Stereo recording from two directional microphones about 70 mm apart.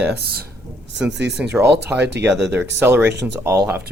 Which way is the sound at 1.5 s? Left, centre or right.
Right.